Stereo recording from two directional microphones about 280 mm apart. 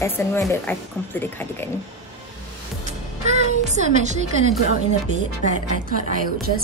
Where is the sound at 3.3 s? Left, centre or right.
Right.